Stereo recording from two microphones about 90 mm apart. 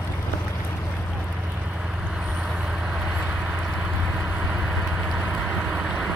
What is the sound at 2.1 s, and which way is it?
Vehicle, 5° right (ahead or behind).